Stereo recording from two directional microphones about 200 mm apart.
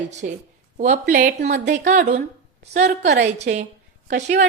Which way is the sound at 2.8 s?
55° right (ahead or behind).